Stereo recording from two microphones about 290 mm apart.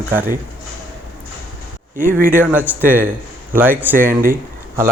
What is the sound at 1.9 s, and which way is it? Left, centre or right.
Speech, right.